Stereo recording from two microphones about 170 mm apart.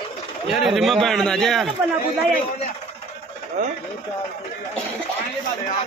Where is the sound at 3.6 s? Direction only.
45° right (ahead or behind).